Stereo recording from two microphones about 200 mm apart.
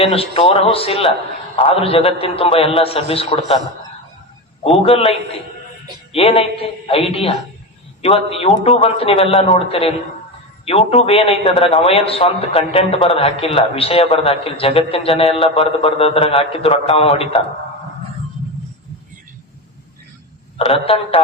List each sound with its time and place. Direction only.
0.0 s a man's voice: 30° left (ahead or behind)
4.8 s a man's voice: 30° left (ahead or behind)
20.6 s a man's voice: 30° left (ahead or behind)